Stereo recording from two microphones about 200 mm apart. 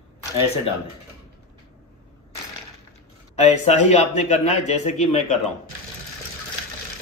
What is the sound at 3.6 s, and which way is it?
Speech, 35° left (ahead or behind).